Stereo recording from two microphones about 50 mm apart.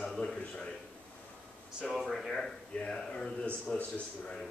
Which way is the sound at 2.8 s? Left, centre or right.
Centre.